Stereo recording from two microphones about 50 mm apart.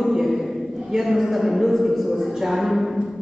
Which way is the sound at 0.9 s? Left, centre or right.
Centre.